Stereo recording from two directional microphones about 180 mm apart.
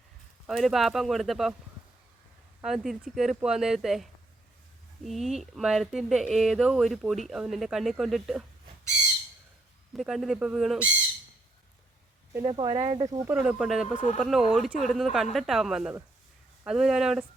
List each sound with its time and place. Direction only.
0.4 s speech: centre (ahead or behind)
2.6 s speech: centre (ahead or behind)
9.9 s speech: centre (ahead or behind)
12.5 s speech: 25° right (ahead or behind)
13.2 s speech: 10° right (ahead or behind)